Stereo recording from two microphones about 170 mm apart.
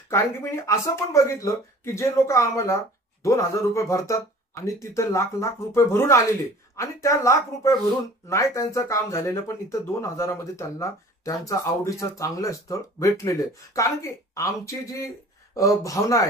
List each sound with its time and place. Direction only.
0.1 s speech: 15° left (ahead or behind)